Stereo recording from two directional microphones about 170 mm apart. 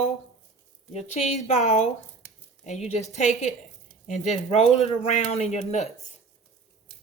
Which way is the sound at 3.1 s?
45° left (ahead or behind).